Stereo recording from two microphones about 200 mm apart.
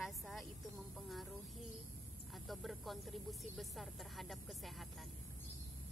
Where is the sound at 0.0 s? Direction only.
Centre (ahead or behind).